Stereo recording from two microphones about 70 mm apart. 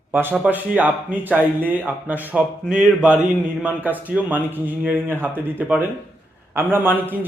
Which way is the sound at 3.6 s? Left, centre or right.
Right.